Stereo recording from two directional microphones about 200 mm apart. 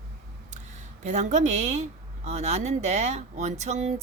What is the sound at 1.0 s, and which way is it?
Speech, 35° right (ahead or behind).